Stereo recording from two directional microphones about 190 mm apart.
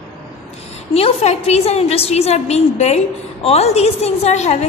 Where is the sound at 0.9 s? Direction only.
30° left (ahead or behind).